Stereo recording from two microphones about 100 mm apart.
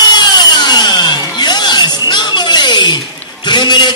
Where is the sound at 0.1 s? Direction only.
45° left (ahead or behind).